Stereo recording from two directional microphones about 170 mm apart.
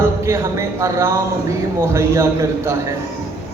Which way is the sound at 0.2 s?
15° right (ahead or behind).